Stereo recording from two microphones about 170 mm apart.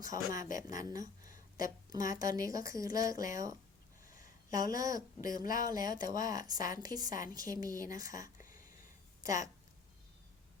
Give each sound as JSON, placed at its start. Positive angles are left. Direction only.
{"t": 0.0, "sound": "speech", "side_deg": -20}
{"t": 0.4, "sound": "a woman's voice", "side_deg": 50}
{"t": 0.8, "sound": "speech", "side_deg": -20}
{"t": 1.3, "sound": "a sound", "side_deg": 55}
{"t": 1.9, "sound": "speech", "side_deg": -20}
{"t": 4.5, "sound": "speech", "side_deg": -20}
{"t": 4.9, "sound": "a woman's voice", "side_deg": 55}
{"t": 5.6, "sound": "speech", "side_deg": -20}